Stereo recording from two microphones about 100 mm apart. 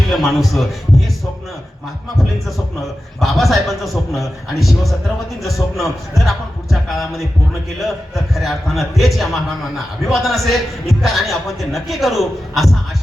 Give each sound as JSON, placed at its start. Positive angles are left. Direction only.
{"t": 0.1, "sound": "a man's voice", "side_deg": 0}
{"t": 3.2, "sound": "a man's voice", "side_deg": 0}